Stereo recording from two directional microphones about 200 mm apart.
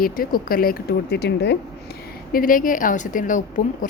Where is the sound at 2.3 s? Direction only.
45° left (ahead or behind).